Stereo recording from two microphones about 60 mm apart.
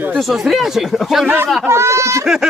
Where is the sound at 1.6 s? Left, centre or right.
Right.